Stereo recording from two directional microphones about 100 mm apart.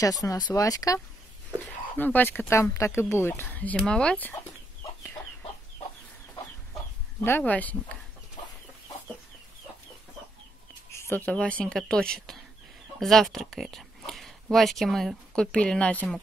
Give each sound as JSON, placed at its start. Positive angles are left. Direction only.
{"t": 0.0, "sound": "speech", "side_deg": 35}
{"t": 2.0, "sound": "speech", "side_deg": 20}
{"t": 7.2, "sound": "speech", "side_deg": 20}
{"t": 10.9, "sound": "a sound", "side_deg": 25}
{"t": 11.3, "sound": "speech", "side_deg": 10}